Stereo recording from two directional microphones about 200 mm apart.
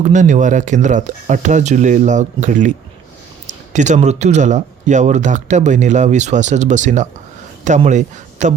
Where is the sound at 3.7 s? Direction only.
35° right (ahead or behind).